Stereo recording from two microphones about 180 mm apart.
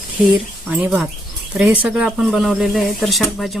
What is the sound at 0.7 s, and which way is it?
Speech, 10° right (ahead or behind).